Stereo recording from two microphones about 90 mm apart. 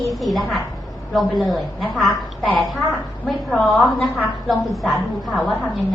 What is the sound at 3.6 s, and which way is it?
A woman's voice, 15° left (ahead or behind).